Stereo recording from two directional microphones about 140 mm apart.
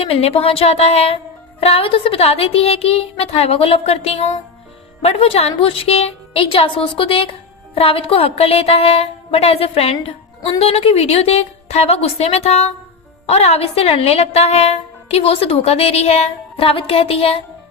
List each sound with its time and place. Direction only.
0.0 s a woman's voice: 45° left (ahead or behind)